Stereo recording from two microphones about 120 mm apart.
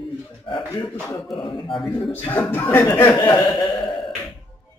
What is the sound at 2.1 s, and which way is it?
A man's voice, 15° left (ahead or behind).